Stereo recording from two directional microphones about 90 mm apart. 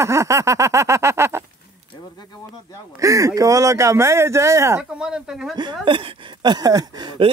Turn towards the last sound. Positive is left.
turn(degrees=-50)  # may be behind; listen again after turning